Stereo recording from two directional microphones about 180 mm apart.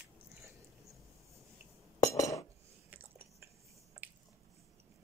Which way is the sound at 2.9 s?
10° right (ahead or behind).